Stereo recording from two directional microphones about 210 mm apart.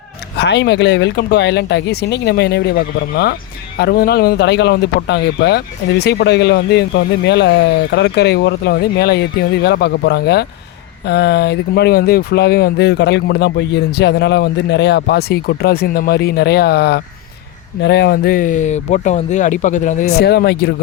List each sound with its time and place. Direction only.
0.3 s speech: 55° left (ahead or behind)